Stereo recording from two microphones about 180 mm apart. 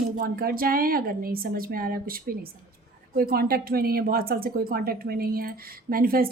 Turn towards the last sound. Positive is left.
turn(degrees=-55)  # may be behind; listen again after turning